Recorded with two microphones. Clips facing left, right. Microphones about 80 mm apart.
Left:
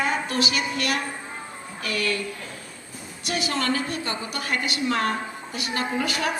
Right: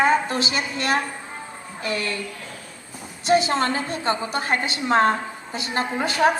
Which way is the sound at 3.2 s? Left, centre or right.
Right.